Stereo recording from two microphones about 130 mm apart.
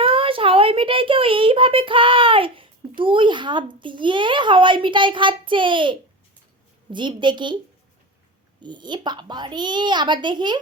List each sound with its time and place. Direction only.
0.0 s a child's voice: 45° right (ahead or behind)
8.6 s a woman's voice: 35° right (ahead or behind)